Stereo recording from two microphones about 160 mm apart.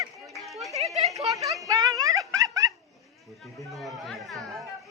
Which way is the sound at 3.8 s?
Centre (ahead or behind).